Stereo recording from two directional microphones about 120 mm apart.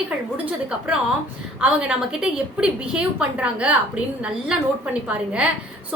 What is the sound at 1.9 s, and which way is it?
A woman's voice, 5° right (ahead or behind).